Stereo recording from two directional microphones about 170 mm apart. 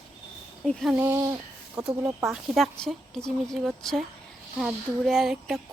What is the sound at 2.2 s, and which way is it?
Speech, centre (ahead or behind).